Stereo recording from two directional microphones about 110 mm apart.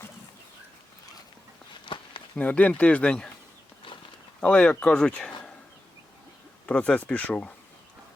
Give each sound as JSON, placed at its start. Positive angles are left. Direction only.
{"t": 1.8, "sound": "a sound", "side_deg": 50}
{"t": 2.3, "sound": "speech", "side_deg": 10}
{"t": 4.4, "sound": "speech", "side_deg": 10}
{"t": 6.7, "sound": "speech", "side_deg": 10}